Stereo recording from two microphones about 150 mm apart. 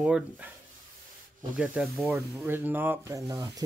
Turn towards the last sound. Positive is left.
turn(degrees=-25)  # may be behind; listen again after turning